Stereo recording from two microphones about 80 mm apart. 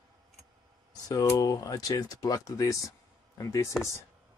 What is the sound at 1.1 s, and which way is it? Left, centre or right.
Speech, left.